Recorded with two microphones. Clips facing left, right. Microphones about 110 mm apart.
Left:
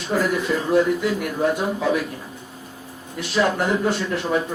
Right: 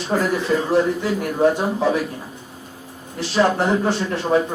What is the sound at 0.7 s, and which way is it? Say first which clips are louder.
A man's voice: left 3 dB; 30° right (ahead or behind).